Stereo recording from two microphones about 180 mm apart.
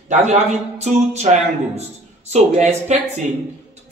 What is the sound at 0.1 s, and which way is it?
A man's voice, 40° right (ahead or behind).